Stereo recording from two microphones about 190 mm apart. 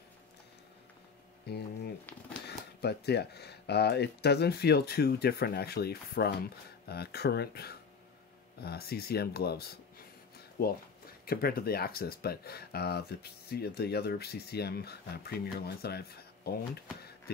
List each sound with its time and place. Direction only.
1.5 s speech: 60° left (ahead or behind)